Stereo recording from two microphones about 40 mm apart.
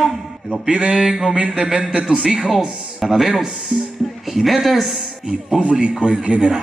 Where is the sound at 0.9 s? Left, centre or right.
Centre.